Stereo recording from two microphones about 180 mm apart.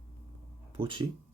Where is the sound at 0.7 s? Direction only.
30° right (ahead or behind).